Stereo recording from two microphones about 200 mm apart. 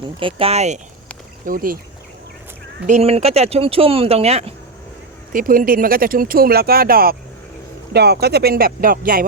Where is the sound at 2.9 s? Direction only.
30° right (ahead or behind).